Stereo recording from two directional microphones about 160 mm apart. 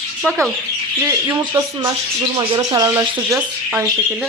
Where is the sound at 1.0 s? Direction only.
20° right (ahead or behind).